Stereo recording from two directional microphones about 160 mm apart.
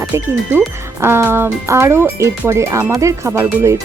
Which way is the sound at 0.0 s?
20° right (ahead or behind).